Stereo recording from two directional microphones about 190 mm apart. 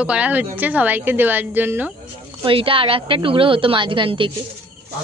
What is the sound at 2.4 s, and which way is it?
A woman's voice, 30° right (ahead or behind).